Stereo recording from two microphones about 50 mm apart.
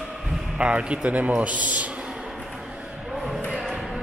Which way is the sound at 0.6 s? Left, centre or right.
Right.